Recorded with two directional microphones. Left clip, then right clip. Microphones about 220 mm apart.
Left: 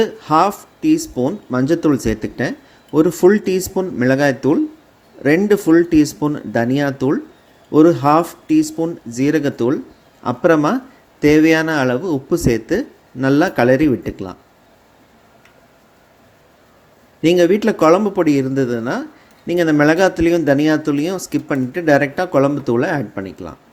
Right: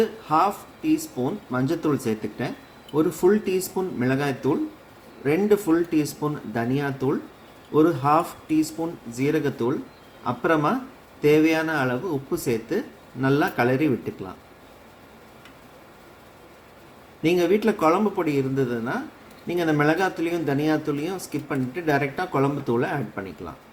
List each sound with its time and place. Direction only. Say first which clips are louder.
0.0 s speech: left 7 dB; 35° left (ahead or behind)
17.2 s speech: left 7 dB; 30° left (ahead or behind)